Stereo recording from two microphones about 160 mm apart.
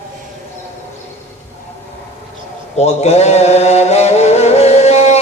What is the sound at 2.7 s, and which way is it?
Music, 40° left (ahead or behind).